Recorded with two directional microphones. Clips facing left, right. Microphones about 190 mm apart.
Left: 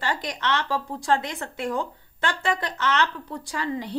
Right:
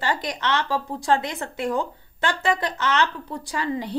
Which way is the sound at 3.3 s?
20° right (ahead or behind).